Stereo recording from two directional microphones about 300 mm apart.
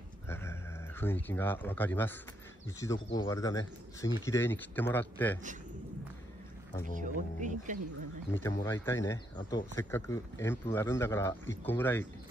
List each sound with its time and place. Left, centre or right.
0.3 s a sound: centre
2.8 s speech: centre
7.0 s speech: right
8.3 s speech: centre